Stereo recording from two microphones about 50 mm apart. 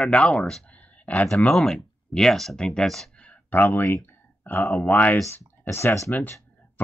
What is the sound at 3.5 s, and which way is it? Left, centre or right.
Speech, left.